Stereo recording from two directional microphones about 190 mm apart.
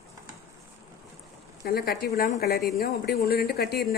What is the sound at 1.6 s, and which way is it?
A woman's voice, 55° left (ahead or behind).